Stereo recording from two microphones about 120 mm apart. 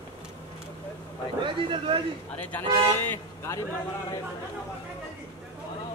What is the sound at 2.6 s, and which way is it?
Speech, 45° right (ahead or behind).